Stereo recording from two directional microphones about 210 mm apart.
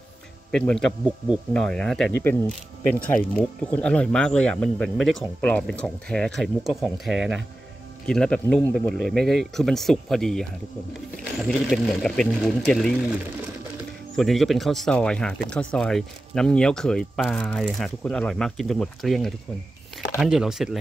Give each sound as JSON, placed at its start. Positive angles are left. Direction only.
{"t": 0.5, "sound": "speech", "side_deg": 5}
{"t": 14.1, "sound": "speech", "side_deg": 0}